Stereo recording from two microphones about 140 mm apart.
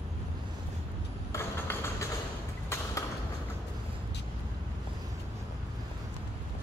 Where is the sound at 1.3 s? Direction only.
20° left (ahead or behind).